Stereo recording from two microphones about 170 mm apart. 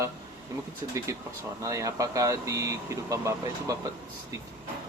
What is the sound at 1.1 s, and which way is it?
Speech, 20° right (ahead or behind).